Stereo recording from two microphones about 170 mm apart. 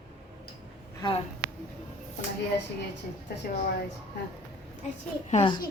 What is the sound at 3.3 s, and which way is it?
Speech, 70° left (ahead or behind).